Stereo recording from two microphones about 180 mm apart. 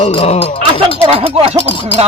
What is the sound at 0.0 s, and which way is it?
Speech, 35° left (ahead or behind).